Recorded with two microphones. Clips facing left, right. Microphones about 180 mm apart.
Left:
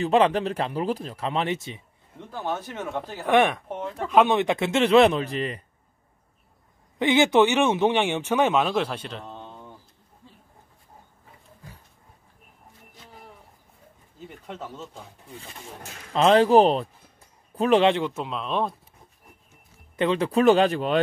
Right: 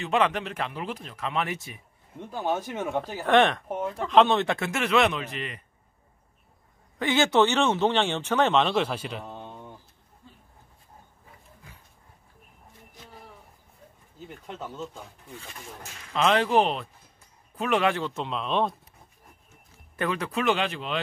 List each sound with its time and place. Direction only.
0.0 s speech: 35° left (ahead or behind)
2.1 s speech: 15° right (ahead or behind)
3.3 s speech: 10° left (ahead or behind)
3.6 s speech: 5° right (ahead or behind)
4.1 s a man's voice: 10° left (ahead or behind); by 5.6 s 35° left (ahead or behind)
7.0 s speech: 15° left (ahead or behind); by 9.5 s 10° right (ahead or behind)
14.4 s speech: 5° left (ahead or behind)
16.1 s a man's voice: 35° left (ahead or behind)
18.1 s speech: centre (ahead or behind)
20.0 s speech: 25° left (ahead or behind); by 21.0 s 45° left (ahead or behind)